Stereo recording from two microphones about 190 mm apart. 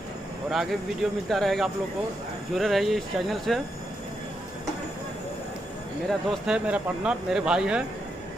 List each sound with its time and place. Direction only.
0.5 s speech: centre (ahead or behind)
6.0 s speech: 5° right (ahead or behind)